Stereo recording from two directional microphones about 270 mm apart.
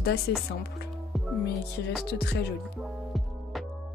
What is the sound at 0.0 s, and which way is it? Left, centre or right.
Speech, left.